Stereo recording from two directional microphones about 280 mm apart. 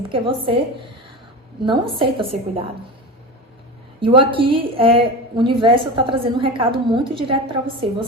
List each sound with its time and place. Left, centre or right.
0.1 s a woman's voice: centre
4.0 s a woman's voice: centre